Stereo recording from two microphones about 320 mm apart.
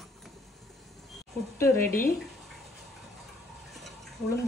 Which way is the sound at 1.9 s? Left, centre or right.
Left.